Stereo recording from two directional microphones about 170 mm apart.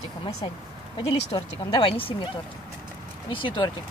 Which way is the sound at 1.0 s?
30° left (ahead or behind).